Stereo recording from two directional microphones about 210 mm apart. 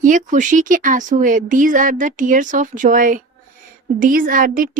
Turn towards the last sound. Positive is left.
turn(degrees=-40)  # may be behind; listen again after turning